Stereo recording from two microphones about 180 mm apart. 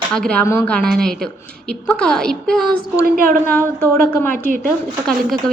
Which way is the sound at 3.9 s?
15° left (ahead or behind).